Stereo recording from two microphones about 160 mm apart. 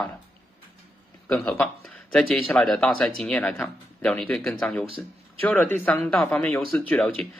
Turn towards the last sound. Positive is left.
turn(degrees=5)  # may be behind; listen again after turning